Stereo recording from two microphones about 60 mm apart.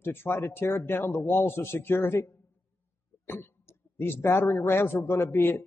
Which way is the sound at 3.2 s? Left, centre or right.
Left.